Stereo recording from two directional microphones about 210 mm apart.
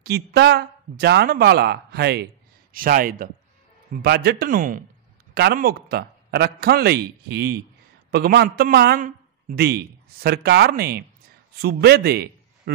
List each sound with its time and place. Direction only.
0.0 s a man's voice: 50° right (ahead or behind)